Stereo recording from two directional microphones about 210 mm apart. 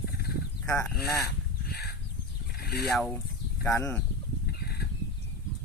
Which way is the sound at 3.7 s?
15° left (ahead or behind).